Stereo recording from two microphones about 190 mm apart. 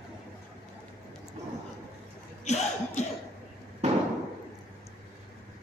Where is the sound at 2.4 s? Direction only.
35° left (ahead or behind).